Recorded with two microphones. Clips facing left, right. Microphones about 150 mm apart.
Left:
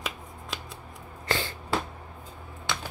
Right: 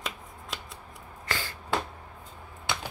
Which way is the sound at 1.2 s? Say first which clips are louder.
Left 5 dB; 25° left (ahead or behind).